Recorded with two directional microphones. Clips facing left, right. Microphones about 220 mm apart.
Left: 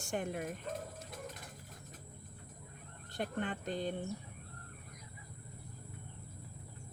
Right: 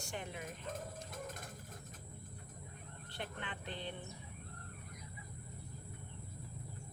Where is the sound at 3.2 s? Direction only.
45° left (ahead or behind).